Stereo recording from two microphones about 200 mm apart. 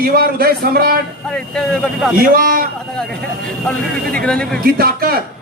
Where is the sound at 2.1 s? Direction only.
45° right (ahead or behind).